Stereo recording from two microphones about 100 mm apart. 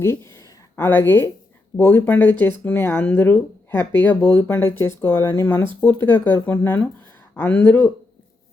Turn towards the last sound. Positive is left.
turn(degrees=20)  # may be behind; listen again after turning